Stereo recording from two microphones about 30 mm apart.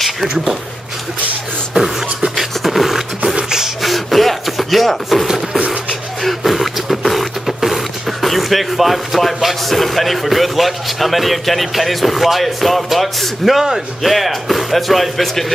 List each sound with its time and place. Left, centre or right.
1.7 s beatboxing: centre
2.3 s beatboxing: centre
3.4 s a sound: centre
3.8 s rub: centre
6.4 s beatboxing: centre
13.6 s speech: centre